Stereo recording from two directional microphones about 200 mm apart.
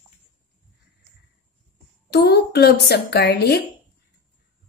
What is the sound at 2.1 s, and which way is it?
A woman's voice, 55° left (ahead or behind).